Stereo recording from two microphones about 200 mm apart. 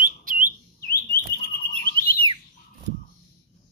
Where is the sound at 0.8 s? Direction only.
50° left (ahead or behind).